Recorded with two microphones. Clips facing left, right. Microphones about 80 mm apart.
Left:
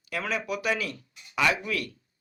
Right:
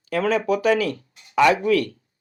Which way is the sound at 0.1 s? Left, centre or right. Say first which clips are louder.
Right 10 dB; right.